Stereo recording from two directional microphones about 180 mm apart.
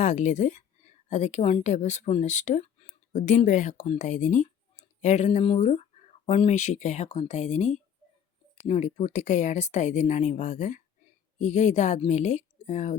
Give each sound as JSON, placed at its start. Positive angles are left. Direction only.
{"t": 0.0, "sound": "speech", "side_deg": 40}